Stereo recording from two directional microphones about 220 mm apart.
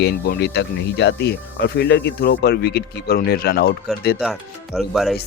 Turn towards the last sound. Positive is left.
turn(degrees=0)  # may be behind; listen again after turning